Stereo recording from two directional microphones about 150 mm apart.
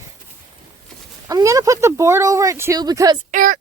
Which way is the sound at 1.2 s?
20° right (ahead or behind).